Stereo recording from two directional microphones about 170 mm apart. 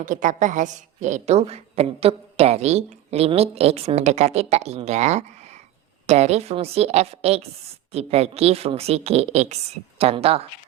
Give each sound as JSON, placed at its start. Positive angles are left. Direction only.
{"t": 0.0, "sound": "a woman's voice", "side_deg": -50}